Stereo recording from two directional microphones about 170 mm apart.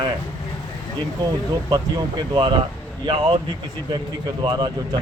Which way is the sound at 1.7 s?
25° right (ahead or behind).